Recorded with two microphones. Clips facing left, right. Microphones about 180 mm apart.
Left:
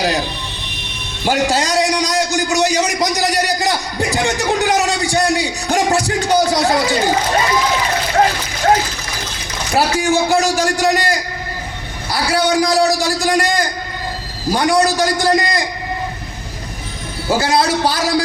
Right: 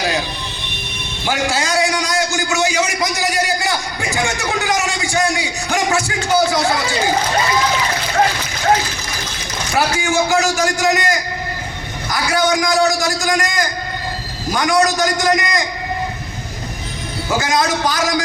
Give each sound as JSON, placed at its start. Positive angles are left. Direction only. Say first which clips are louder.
{"t": 1.2, "sound": "a man's voice", "louder": "left 4 dB", "side_deg": 35}
{"t": 9.7, "sound": "a man's voice", "louder": "left 2 dB", "side_deg": 35}
{"t": 17.2, "sound": "a man's voice", "louder": "left 3 dB", "side_deg": 30}